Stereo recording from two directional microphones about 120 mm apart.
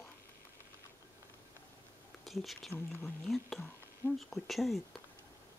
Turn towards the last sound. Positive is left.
turn(degrees=0)  # may be behind; listen again after turning